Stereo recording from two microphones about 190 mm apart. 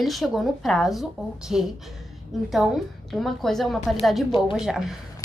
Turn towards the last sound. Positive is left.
turn(degrees=-5)  # may be behind; listen again after turning